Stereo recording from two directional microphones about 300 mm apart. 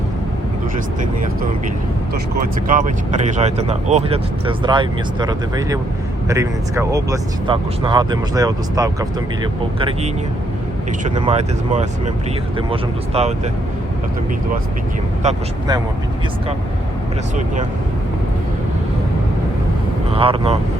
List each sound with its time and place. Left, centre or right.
2.6 s speech: right
15.2 s speech: centre
20.1 s speech: centre